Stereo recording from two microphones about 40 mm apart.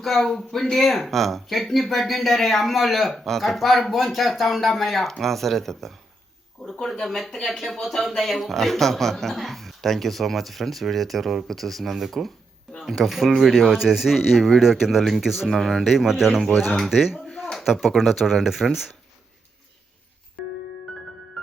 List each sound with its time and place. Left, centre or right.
0.0 s speech: centre
15.5 s speech: centre